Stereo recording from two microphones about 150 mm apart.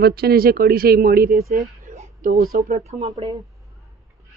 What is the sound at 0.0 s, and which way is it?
Speech, 90° right.